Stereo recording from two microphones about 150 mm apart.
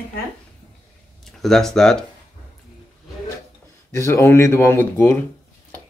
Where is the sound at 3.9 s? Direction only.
20° left (ahead or behind).